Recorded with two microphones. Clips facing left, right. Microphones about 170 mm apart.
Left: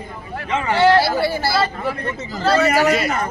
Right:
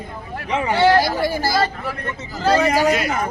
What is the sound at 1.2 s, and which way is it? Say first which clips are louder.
Speech: even; 45° right (ahead or behind).